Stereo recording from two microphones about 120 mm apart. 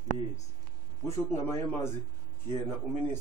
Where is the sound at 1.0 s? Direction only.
25° left (ahead or behind).